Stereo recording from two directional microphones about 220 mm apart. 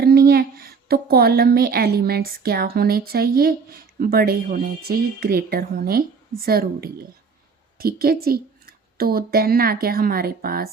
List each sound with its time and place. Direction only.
0.0 s a woman's voice: 45° right (ahead or behind)